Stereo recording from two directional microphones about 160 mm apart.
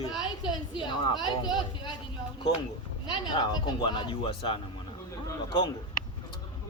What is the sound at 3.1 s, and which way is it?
Speech, 30° left (ahead or behind).